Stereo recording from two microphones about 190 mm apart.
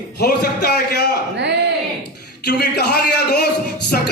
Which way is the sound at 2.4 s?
60° left (ahead or behind).